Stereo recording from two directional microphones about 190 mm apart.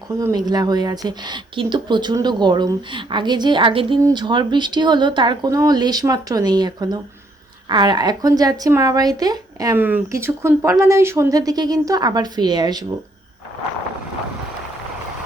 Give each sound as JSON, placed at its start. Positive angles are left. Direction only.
{"t": 0.1, "sound": "speech", "side_deg": -15}